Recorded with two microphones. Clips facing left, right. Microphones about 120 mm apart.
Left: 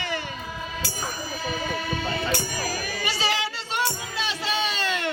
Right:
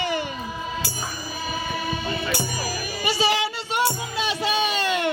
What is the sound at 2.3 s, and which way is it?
Music, 10° right (ahead or behind).